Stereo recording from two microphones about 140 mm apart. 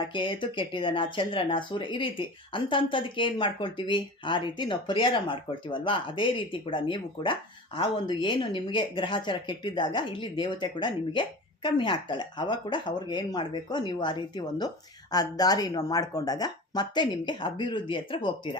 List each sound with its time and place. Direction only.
0.0 s speech: 35° left (ahead or behind)